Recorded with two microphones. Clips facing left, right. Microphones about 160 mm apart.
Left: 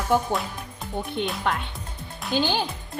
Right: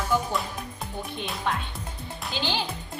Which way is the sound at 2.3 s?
50° left (ahead or behind).